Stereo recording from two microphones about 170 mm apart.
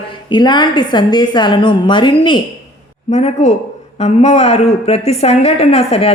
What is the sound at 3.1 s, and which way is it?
A woman's voice, 40° left (ahead or behind).